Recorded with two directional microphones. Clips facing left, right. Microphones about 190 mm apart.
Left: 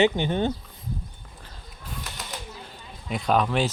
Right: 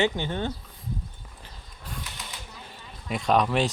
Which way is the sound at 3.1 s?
Centre (ahead or behind).